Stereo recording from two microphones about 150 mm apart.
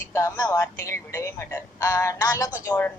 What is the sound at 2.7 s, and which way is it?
Speech, 10° left (ahead or behind).